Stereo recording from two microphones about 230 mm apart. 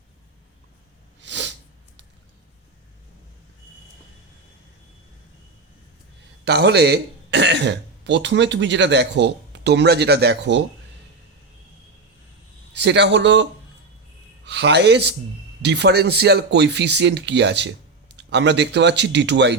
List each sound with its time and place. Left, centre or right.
1.2 s sneeze: right
6.4 s speech: right
12.7 s speech: right